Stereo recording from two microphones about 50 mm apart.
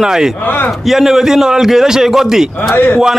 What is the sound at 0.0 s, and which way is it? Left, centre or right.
A man's voice, centre.